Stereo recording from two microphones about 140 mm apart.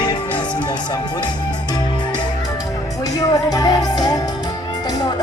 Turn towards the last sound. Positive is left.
turn(degrees=25)  # may be behind; listen again after turning